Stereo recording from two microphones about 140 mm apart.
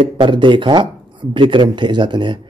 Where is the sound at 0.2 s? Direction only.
35° right (ahead or behind).